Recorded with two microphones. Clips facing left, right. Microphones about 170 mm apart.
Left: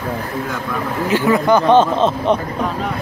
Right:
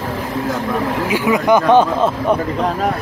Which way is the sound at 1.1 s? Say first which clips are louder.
Left 1 dB; 15° right (ahead or behind).